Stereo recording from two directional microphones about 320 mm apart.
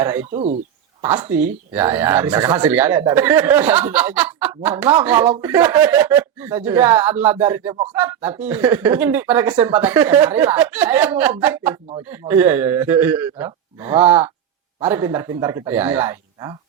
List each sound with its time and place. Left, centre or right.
0.0 s a man's voice: centre
0.3 s speech: right
1.0 s a man's voice: centre